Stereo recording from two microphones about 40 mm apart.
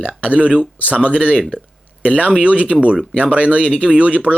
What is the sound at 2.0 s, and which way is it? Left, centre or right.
Speech, left.